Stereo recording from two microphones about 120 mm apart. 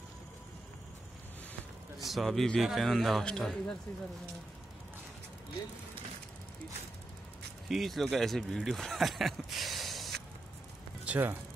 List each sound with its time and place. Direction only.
2.0 s speech: centre (ahead or behind)
7.6 s speech: centre (ahead or behind)
11.1 s speech: 15° right (ahead or behind)